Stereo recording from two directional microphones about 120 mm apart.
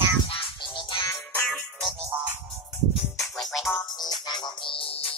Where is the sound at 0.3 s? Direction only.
45° left (ahead or behind).